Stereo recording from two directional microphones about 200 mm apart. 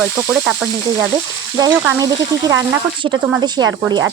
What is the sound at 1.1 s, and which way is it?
Speech, 20° right (ahead or behind).